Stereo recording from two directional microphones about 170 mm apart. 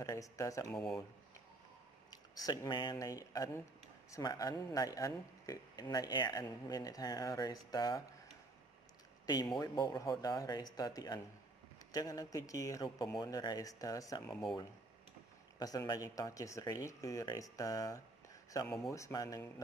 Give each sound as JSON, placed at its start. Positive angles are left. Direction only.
{"t": 0.0, "sound": "speech", "side_deg": 20}
{"t": 0.7, "sound": "speech", "side_deg": 0}
{"t": 2.3, "sound": "speech", "side_deg": 20}
{"t": 9.2, "sound": "speech", "side_deg": 25}
{"t": 14.2, "sound": "speech", "side_deg": 0}
{"t": 15.6, "sound": "speech", "side_deg": 20}